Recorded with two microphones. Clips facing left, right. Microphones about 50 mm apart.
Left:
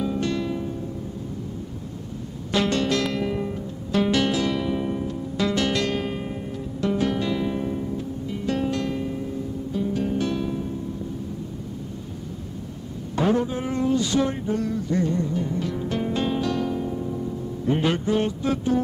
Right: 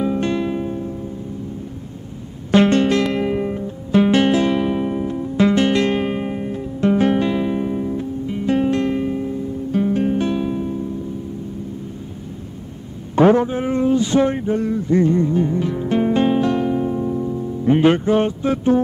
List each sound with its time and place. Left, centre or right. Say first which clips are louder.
0.0 s music: right 5 dB; right
2.5 s music: right 8 dB; right
9.7 s music: right 8 dB; right
10.0 s music: right 6 dB; right
13.2 s a sound: right 9 dB; right
13.5 s a sound: right 6 dB; right
18.4 s music: right 6 dB; right